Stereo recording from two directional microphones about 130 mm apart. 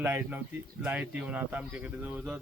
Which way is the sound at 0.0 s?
15° right (ahead or behind).